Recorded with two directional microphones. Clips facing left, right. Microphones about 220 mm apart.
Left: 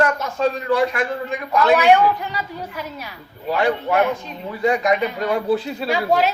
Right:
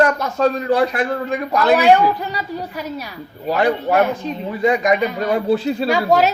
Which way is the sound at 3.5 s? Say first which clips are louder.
Right 2 dB; 40° right (ahead or behind).